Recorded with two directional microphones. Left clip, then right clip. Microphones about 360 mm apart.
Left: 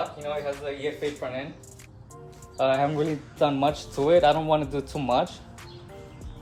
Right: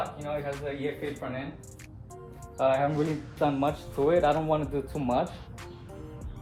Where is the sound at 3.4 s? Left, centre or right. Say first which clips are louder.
Left 4 dB; left.